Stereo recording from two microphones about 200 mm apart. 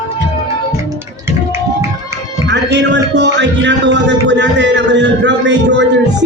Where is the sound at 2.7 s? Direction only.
60° right (ahead or behind).